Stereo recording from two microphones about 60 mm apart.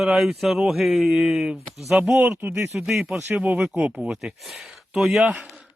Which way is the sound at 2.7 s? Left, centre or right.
Centre.